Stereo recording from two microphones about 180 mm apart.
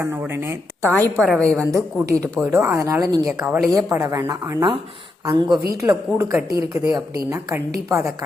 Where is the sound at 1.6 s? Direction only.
20° right (ahead or behind).